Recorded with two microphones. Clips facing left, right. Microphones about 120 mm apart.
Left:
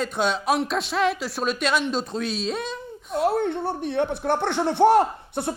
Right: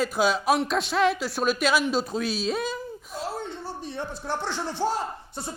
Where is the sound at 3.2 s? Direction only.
60° left (ahead or behind).